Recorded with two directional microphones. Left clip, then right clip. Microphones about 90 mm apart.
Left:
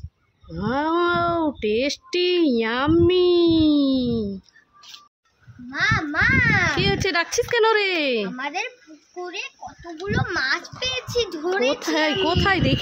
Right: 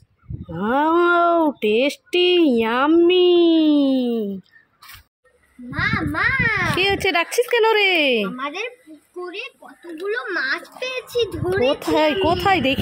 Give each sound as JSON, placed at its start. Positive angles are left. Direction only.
{"t": 0.5, "sound": "cattle", "side_deg": -20}
{"t": 0.9, "sound": "a sound", "side_deg": -25}
{"t": 1.6, "sound": "speech", "side_deg": -30}
{"t": 2.9, "sound": "speech", "side_deg": -10}
{"t": 5.7, "sound": "a child's voice", "side_deg": 10}
{"t": 6.9, "sound": "speech", "side_deg": -25}
{"t": 8.4, "sound": "a child's voice", "side_deg": 15}
{"t": 10.8, "sound": "a child's voice", "side_deg": 35}
{"t": 11.9, "sound": "speech", "side_deg": -10}